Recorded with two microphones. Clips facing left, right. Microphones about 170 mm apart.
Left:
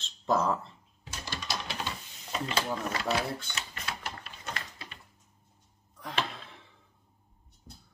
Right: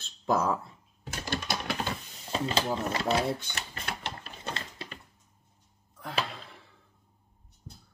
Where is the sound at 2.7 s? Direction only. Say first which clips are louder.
Right 3 dB; 25° right (ahead or behind).